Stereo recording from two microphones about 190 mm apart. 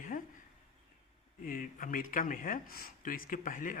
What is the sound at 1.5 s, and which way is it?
Speech, 45° left (ahead or behind).